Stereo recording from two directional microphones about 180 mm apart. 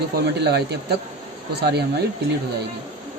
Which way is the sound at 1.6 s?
65° right (ahead or behind).